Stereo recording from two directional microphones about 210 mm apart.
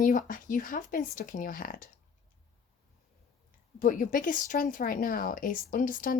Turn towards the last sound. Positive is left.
turn(degrees=40)  # may be behind; listen again after turning